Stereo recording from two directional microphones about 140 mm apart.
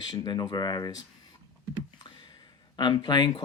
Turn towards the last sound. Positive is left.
turn(degrees=30)  # may be behind; listen again after turning